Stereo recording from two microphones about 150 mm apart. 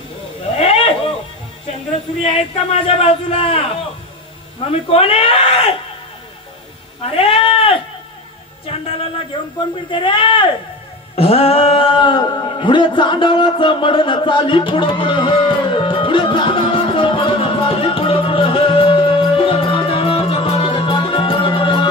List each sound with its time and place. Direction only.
0.6 s a sound: 40° left (ahead or behind)
2.2 s a man's voice: 40° left (ahead or behind)
4.6 s a man's voice: 40° left (ahead or behind)
7.1 s sheep: 40° left (ahead or behind)
8.6 s a man's voice: 40° left (ahead or behind)
11.1 s a sound: 40° left (ahead or behind)